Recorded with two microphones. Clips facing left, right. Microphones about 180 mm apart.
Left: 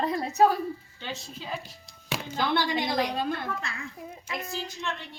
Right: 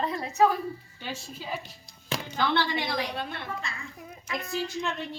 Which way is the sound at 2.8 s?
50° left (ahead or behind).